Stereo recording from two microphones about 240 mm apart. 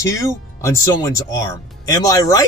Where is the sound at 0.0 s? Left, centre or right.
Centre.